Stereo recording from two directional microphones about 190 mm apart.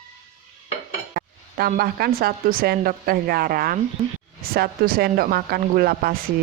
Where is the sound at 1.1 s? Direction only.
50° right (ahead or behind).